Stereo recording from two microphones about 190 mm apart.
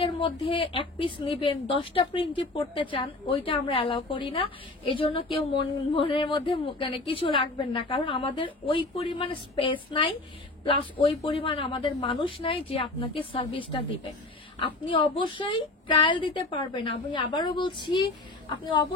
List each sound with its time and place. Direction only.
0.0 s a woman's voice: 25° left (ahead or behind)